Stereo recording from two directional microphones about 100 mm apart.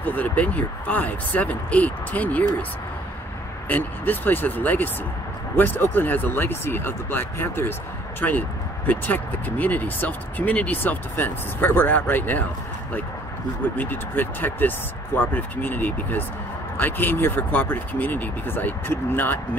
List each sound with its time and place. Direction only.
0.0 s speech: 15° left (ahead or behind)
3.6 s speech: 15° left (ahead or behind)
13.7 s speech: 20° left (ahead or behind)